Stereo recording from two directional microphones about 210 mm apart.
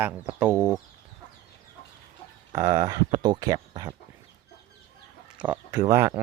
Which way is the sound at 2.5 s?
15° right (ahead or behind).